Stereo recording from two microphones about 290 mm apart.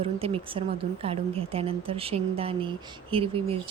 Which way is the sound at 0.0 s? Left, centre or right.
Centre.